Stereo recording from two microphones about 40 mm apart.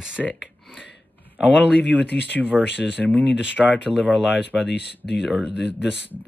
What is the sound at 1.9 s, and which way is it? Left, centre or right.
Speech, right.